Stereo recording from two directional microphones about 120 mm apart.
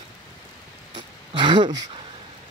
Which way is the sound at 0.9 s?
40° right (ahead or behind).